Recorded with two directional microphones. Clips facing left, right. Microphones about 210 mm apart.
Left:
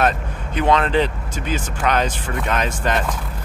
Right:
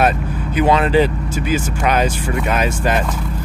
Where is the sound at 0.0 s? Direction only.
5° right (ahead or behind).